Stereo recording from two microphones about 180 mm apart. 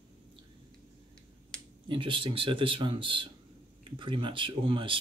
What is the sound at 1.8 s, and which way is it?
Speech, 25° right (ahead or behind).